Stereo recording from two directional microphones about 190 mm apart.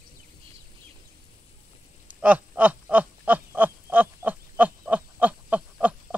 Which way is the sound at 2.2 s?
10° right (ahead or behind).